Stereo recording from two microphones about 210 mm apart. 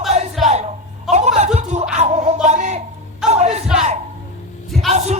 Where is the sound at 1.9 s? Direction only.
35° right (ahead or behind).